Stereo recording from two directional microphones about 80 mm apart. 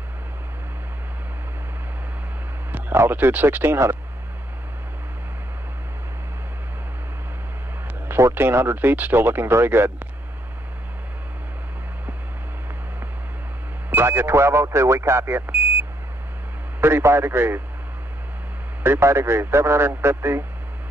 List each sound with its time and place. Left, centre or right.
2.7 s speech: right
8.1 s speech: right
13.8 s speech: right
16.8 s speech: right
18.8 s speech: right